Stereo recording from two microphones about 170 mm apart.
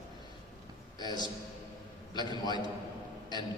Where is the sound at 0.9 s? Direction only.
25° left (ahead or behind).